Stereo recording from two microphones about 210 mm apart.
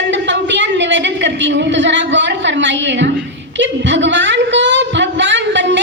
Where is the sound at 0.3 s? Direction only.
60° right (ahead or behind).